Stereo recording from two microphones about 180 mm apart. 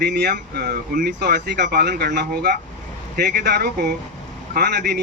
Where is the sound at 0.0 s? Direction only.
70° right (ahead or behind).